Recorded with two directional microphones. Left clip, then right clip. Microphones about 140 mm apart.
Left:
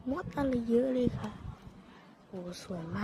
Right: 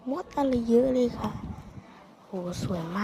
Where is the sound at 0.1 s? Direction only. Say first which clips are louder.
Right 6 dB; 5° right (ahead or behind).